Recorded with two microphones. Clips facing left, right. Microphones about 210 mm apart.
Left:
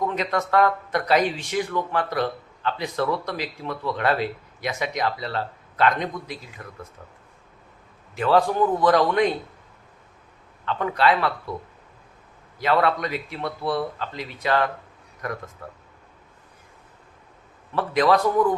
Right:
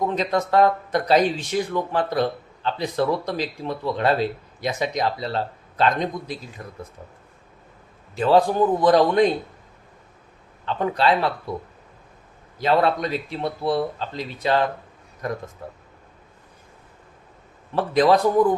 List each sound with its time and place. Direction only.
0.1 s speech: 35° right (ahead or behind)
8.1 s speech: 30° right (ahead or behind)
10.7 s speech: 30° right (ahead or behind)
12.5 s speech: 30° right (ahead or behind)
17.7 s speech: 30° right (ahead or behind)